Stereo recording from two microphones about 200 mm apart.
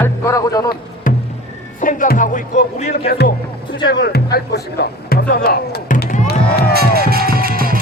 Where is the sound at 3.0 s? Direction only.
50° left (ahead or behind).